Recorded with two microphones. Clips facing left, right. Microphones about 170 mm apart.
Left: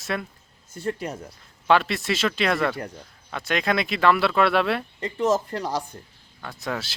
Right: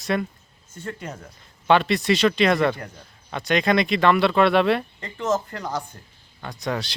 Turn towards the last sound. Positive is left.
turn(degrees=5)  # may be behind; listen again after turning